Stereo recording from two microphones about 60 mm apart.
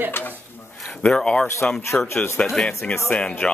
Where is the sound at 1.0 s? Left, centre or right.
Centre.